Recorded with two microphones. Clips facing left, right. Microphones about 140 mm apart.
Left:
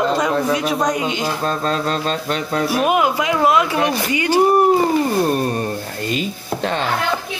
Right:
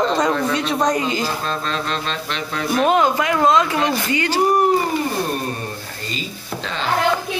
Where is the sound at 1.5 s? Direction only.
45° left (ahead or behind).